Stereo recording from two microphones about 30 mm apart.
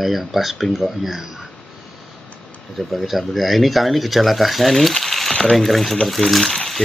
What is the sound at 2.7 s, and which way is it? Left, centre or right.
Speech, centre.